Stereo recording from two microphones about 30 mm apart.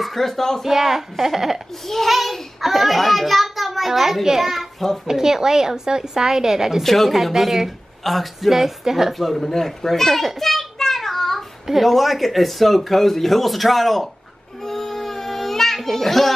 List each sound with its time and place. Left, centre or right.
0.0 s a child's voice: centre
0.7 s a woman's voice: centre
5.0 s speech: centre
6.8 s speech: centre
7.3 s a woman's voice: centre
8.0 s speech: centre
8.5 s a woman's voice: centre
9.2 s a child's voice: centre
10.8 s child singing: centre
11.8 s speech: centre
14.6 s child singing: centre